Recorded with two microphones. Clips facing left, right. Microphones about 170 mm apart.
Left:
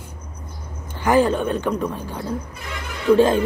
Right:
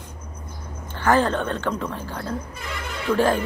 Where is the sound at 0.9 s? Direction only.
15° left (ahead or behind).